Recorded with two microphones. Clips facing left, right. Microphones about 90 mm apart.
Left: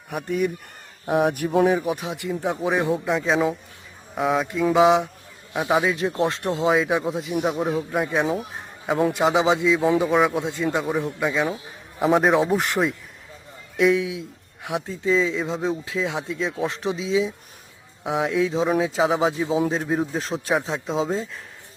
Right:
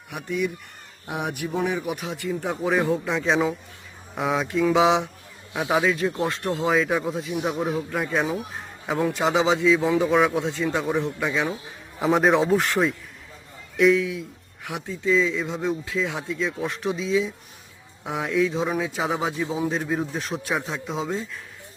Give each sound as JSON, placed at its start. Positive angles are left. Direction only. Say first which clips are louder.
{"t": 0.1, "sound": "speech", "louder": "left 3 dB", "side_deg": 45}
{"t": 1.9, "sound": "speech", "louder": "left 2 dB", "side_deg": 20}
{"t": 3.1, "sound": "speech", "louder": "left 1 dB", "side_deg": 0}
{"t": 5.8, "sound": "speech", "louder": "left 1 dB", "side_deg": 20}
{"t": 6.7, "sound": "speech", "louder": "left 2 dB", "side_deg": 10}
{"t": 7.4, "sound": "speech", "louder": "left 2 dB", "side_deg": 0}
{"t": 7.9, "sound": "speech", "louder": "left 3 dB", "side_deg": 15}
{"t": 12.5, "sound": "speech", "louder": "even", "side_deg": 15}